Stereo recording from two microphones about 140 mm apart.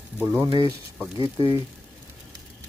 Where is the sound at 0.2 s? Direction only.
15° right (ahead or behind).